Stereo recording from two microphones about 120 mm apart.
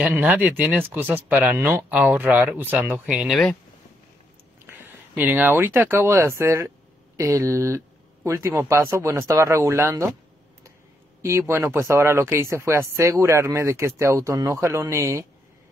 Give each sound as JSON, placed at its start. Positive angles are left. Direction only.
{"t": 0.0, "sound": "speech", "side_deg": -15}
{"t": 3.1, "sound": "speech", "side_deg": -5}
{"t": 4.6, "sound": "speech", "side_deg": -15}
{"t": 11.2, "sound": "speech", "side_deg": -20}